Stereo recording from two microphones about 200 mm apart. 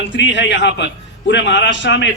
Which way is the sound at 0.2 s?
60° left (ahead or behind).